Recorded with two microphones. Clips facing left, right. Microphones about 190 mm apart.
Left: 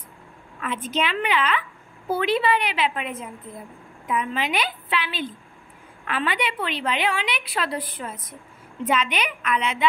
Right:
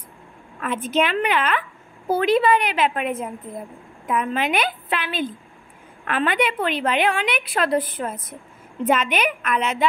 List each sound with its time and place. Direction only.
0.6 s a woman's voice: 50° right (ahead or behind)